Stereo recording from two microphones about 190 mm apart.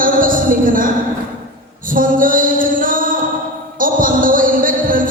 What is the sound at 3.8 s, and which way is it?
Music, 45° right (ahead or behind).